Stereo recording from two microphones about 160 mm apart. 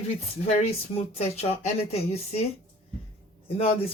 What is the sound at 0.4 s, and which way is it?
Speech, 45° left (ahead or behind).